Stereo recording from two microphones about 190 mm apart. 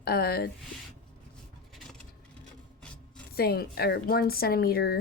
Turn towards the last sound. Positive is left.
turn(degrees=55)  # may be behind; listen again after turning